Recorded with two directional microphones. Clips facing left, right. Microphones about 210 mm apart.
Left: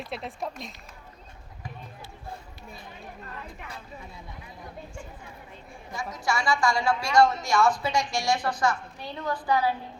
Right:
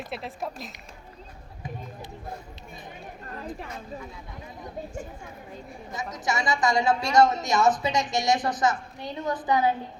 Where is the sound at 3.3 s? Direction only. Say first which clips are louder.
Right 6 dB; 40° right (ahead or behind).